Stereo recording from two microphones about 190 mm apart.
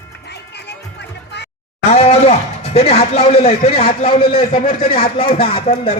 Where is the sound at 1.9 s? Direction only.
35° left (ahead or behind).